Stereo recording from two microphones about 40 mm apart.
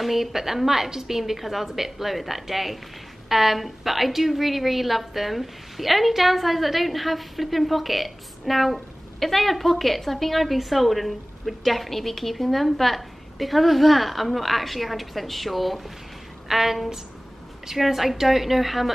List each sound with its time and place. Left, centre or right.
0.0 s a woman's voice: centre